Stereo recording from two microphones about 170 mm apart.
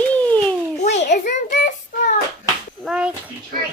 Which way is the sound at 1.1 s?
45° left (ahead or behind).